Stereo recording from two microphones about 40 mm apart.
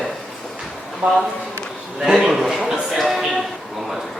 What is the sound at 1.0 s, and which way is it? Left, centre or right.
Speech, right.